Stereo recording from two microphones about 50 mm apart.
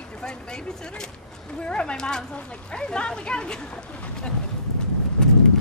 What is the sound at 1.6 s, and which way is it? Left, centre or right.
Speech, centre.